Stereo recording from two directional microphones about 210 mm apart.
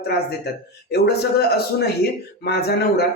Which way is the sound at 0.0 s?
50° left (ahead or behind).